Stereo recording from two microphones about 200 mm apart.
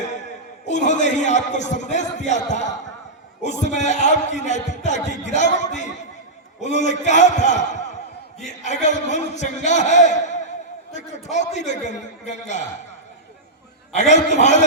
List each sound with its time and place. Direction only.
0.0 s a man's voice: 35° left (ahead or behind)
13.9 s a man's voice: 35° left (ahead or behind)